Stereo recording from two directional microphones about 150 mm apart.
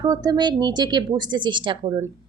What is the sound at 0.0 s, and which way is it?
A woman's voice, 25° right (ahead or behind).